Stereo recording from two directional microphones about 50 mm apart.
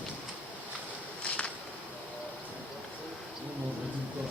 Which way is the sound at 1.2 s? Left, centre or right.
Left.